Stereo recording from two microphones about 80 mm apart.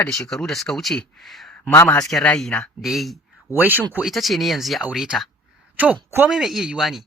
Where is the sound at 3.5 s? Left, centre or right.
Right.